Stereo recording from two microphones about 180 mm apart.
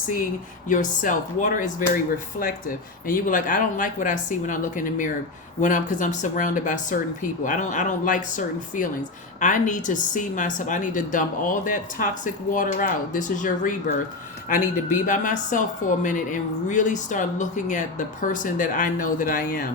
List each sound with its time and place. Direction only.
0.7 s a woman's voice: 45° left (ahead or behind)